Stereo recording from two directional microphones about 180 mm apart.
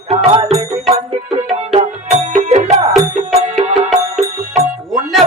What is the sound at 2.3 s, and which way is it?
Music, 45° right (ahead or behind).